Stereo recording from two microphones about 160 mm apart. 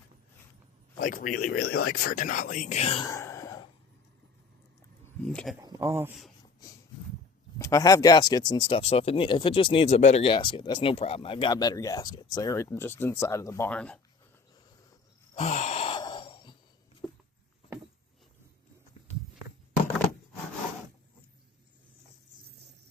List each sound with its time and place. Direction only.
0.9 s speech: 55° left (ahead or behind); by 3.1 s 35° left (ahead or behind)
3.1 s a sound: 20° left (ahead or behind)
5.3 s speech: 5° left (ahead or behind)
5.6 s speech: 20° right (ahead or behind)
7.6 s speech: 20° left (ahead or behind)
13.7 s speech: 5° left (ahead or behind)
15.4 s sigh: 45° left (ahead or behind)
17.0 s a sound: 5° left (ahead or behind)